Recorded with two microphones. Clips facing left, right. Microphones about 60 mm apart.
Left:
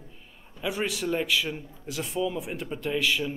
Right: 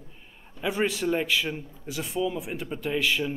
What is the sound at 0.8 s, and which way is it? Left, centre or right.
Speech, centre.